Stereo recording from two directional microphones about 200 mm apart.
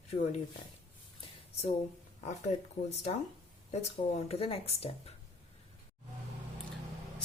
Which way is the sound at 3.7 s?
30° left (ahead or behind).